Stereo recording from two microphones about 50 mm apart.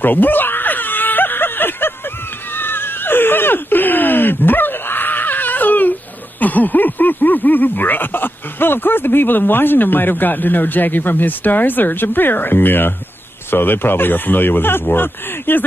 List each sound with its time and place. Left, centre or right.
0.0 s screaming: left
2.5 s wail: left
6.4 s speech: left